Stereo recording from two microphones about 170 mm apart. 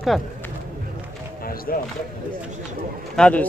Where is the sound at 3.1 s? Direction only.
5° left (ahead or behind).